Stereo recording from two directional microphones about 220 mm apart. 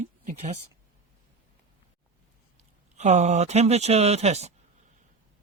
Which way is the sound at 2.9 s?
30° right (ahead or behind).